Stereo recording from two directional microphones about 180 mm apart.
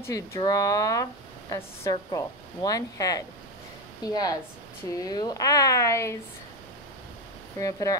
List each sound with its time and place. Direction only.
0.0 s a woman's voice: 15° left (ahead or behind)
7.5 s a woman's voice: 20° left (ahead or behind)